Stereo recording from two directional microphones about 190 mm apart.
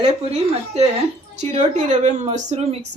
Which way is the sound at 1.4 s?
40° right (ahead or behind).